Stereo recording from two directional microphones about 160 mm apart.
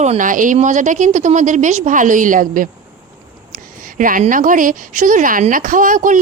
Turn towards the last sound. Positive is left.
turn(degrees=-55)  # may be behind; listen again after turning